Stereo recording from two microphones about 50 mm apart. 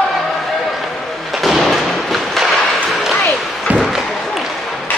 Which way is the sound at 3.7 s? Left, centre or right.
Right.